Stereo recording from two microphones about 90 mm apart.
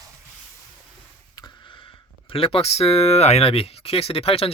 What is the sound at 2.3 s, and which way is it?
Speech, 90° left.